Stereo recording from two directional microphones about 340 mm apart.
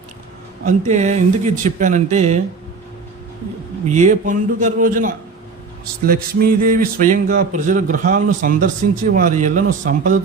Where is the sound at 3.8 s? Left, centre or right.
Right.